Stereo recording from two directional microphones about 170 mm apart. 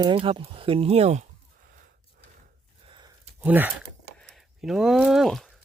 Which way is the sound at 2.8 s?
30° right (ahead or behind).